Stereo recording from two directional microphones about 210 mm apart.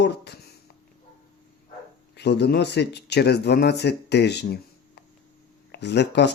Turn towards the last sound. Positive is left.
turn(degrees=55)  # may be behind; listen again after turning